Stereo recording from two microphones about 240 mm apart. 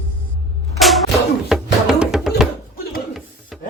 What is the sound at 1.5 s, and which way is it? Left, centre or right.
Music, centre.